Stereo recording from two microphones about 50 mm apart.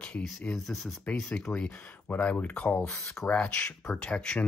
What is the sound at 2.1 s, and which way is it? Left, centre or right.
Speech, left.